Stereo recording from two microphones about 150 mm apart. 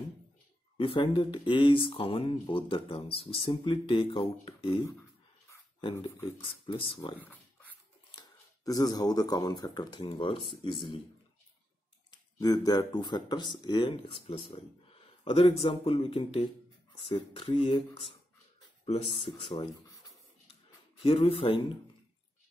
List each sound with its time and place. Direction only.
0.7 s speech: 35° left (ahead or behind)
6.0 s speech: 15° left (ahead or behind)
6.6 s speech: 35° left (ahead or behind)
12.1 s speech: 25° left (ahead or behind)
19.2 s speech: 40° left (ahead or behind)
21.0 s speech: 40° left (ahead or behind)